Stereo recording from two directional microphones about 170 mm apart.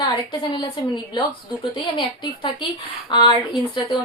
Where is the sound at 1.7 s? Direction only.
25° left (ahead or behind).